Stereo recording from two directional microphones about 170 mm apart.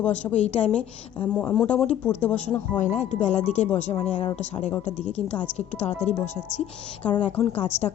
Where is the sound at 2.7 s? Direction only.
45° left (ahead or behind).